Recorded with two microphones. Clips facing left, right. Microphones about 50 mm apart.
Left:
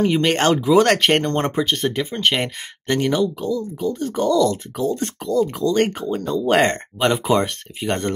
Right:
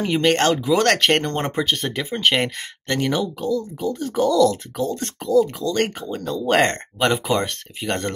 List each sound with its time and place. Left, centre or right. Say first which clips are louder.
0.0 s speech: left 1 dB; centre
0.4 s speech: left 3 dB; centre
5.5 s speech: left 4 dB; left
6.0 s speech: left 3 dB; centre